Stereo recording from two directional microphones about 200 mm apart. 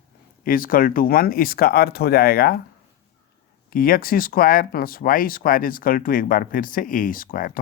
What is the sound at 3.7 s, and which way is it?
Speech, 45° left (ahead or behind).